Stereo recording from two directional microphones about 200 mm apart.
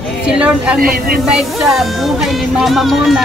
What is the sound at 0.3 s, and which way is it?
Speech, 5° right (ahead or behind).